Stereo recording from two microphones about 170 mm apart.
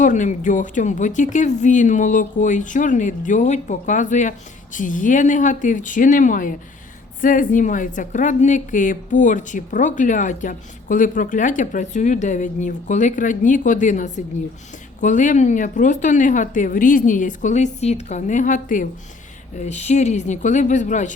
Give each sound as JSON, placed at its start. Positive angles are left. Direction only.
{"t": 0.0, "sound": "a woman's voice", "side_deg": 45}